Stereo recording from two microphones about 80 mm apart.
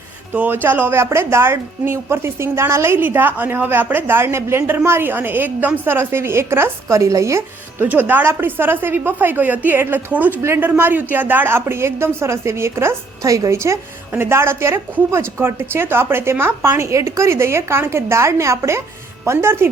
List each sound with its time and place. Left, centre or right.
0.3 s a woman's voice: right
7.8 s a woman's voice: right